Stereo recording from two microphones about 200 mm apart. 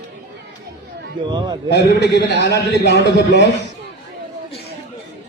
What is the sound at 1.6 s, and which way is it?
A man's voice, 60° left (ahead or behind).